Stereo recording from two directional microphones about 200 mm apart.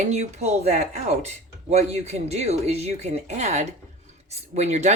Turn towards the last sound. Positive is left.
turn(degrees=-35)  # may be behind; listen again after turning